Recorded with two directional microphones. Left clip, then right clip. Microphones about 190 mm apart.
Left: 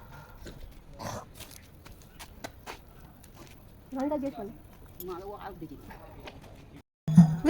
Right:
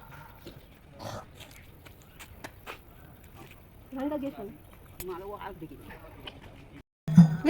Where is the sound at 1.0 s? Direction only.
50° left (ahead or behind).